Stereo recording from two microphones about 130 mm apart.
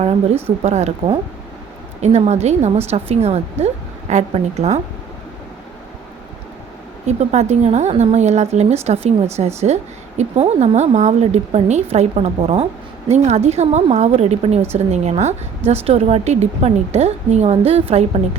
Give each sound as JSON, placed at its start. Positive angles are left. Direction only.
{"t": 0.4, "sound": "a woman's voice", "side_deg": -55}
{"t": 7.1, "sound": "a woman's voice", "side_deg": -60}